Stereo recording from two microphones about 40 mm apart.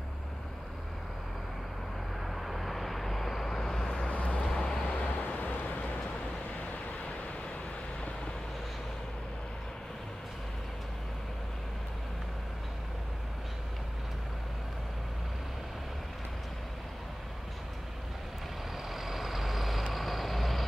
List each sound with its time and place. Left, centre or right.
2.2 s vehicle: centre
3.9 s vehicle: left
4.8 s vehicle: left
18.9 s vehicle: centre